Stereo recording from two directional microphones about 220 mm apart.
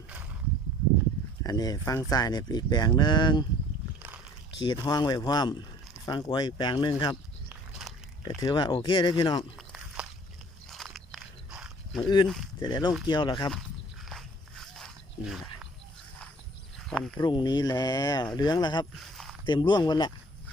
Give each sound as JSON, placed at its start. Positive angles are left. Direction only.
{"t": 1.5, "sound": "speech", "side_deg": 15}
{"t": 4.6, "sound": "speech", "side_deg": 20}
{"t": 7.7, "sound": "a sound", "side_deg": 0}
{"t": 8.4, "sound": "speech", "side_deg": 20}
{"t": 9.6, "sound": "walk", "side_deg": 0}
{"t": 11.9, "sound": "speech", "side_deg": 20}
{"t": 14.1, "sound": "biting", "side_deg": 0}
{"t": 16.7, "sound": "a sound", "side_deg": 0}
{"t": 17.2, "sound": "speech", "side_deg": 20}
{"t": 18.9, "sound": "a sound", "side_deg": 0}
{"t": 19.5, "sound": "speech", "side_deg": 20}